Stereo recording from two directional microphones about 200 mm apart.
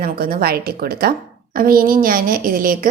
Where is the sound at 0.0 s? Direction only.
45° right (ahead or behind).